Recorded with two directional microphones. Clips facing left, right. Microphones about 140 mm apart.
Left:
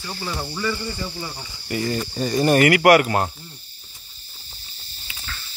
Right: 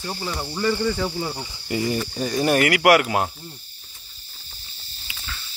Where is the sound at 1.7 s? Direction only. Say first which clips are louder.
Right 1 dB; 20° right (ahead or behind).